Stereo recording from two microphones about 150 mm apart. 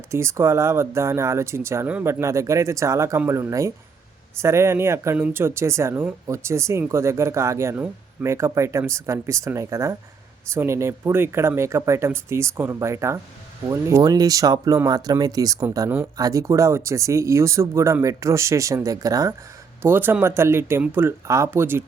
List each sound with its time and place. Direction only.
0.1 s speech: 20° right (ahead or behind)